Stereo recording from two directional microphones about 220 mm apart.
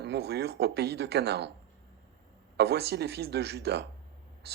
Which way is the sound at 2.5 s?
50° right (ahead or behind).